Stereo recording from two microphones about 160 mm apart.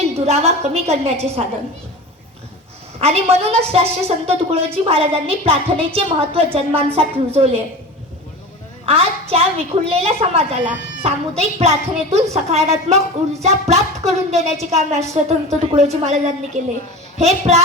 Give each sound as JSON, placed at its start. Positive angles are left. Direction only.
{"t": 0.0, "sound": "a woman's voice", "side_deg": -40}
{"t": 3.0, "sound": "a woman's voice", "side_deg": -40}
{"t": 9.3, "sound": "a woman's voice", "side_deg": -40}